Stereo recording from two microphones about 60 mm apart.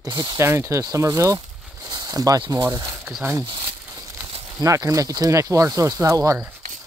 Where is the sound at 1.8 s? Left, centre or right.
Right.